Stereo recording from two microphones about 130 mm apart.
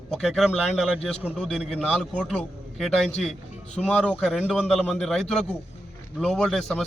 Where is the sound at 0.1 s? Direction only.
Centre (ahead or behind).